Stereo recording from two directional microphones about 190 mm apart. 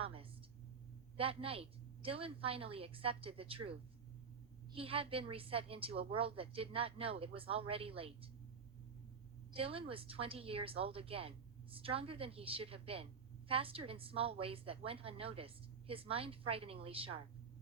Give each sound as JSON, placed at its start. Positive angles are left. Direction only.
{"t": 0.0, "sound": "a sound", "side_deg": -30}
{"t": 1.1, "sound": "a woman's voice", "side_deg": -30}
{"t": 9.5, "sound": "a woman's voice", "side_deg": -30}